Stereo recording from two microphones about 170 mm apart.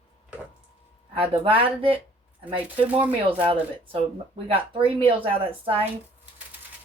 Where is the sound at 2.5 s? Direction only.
10° right (ahead or behind).